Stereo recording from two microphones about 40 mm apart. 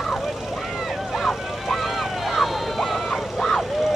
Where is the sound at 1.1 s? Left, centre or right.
Centre.